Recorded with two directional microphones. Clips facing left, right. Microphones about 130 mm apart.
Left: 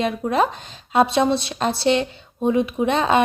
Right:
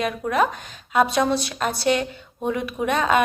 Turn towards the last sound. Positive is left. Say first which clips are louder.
# left 2 dB
turn(degrees=25)  # may be behind; listen again after turning